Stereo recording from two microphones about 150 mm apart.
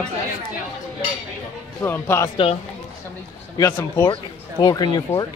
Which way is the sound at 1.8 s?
15° left (ahead or behind).